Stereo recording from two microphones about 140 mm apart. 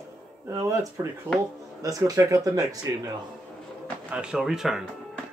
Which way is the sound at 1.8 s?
25° right (ahead or behind).